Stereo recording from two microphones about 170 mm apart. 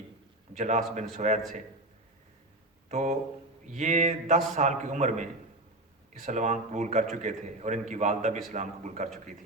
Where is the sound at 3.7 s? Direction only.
45° right (ahead or behind).